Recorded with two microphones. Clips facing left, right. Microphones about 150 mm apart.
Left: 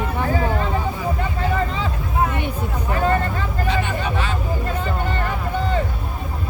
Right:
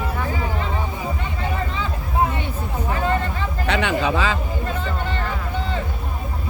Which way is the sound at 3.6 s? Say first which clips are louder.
Right 3 dB; 80° right.